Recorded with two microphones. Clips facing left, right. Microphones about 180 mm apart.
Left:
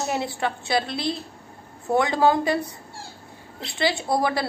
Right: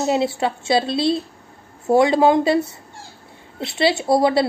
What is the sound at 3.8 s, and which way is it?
Speech, 25° right (ahead or behind).